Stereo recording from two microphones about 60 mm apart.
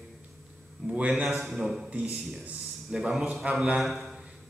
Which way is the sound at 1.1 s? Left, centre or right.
Centre.